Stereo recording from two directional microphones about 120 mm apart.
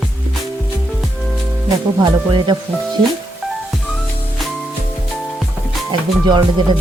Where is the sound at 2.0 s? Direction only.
40° right (ahead or behind).